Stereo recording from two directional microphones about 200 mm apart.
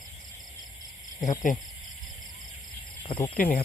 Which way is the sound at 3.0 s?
25° left (ahead or behind).